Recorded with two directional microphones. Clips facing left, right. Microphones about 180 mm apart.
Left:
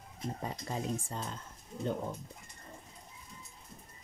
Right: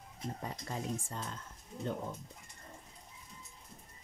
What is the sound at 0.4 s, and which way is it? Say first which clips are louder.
Speech: left 3 dB; 25° left (ahead or behind).